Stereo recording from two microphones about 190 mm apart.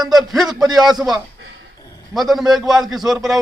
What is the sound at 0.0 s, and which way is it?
Speech, centre (ahead or behind).